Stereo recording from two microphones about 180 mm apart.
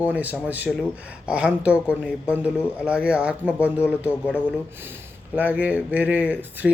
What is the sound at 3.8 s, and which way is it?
Speech, 10° left (ahead or behind).